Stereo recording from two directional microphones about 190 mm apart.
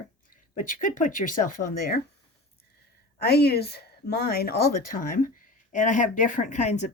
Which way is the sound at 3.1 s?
55° left (ahead or behind).